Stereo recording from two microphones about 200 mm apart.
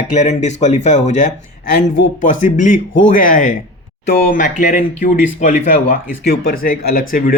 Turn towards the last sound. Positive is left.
turn(degrees=45)  # may be behind; listen again after turning